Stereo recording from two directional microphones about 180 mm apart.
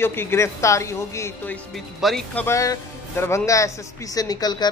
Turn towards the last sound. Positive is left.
turn(degrees=20)  # may be behind; listen again after turning